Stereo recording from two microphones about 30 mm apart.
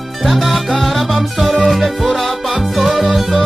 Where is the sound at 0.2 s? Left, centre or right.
Centre.